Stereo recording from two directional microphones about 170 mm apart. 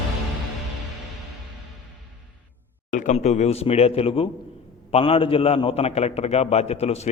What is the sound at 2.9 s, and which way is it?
A man's voice, 45° left (ahead or behind).